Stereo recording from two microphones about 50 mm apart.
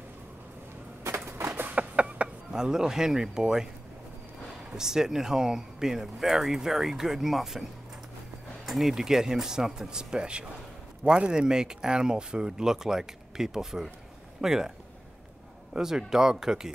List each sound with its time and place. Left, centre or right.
1.2 s a sound: right
1.8 s a sound: right
2.5 s speech: centre
4.7 s speech: centre
8.6 s speech: centre
15.7 s speech: centre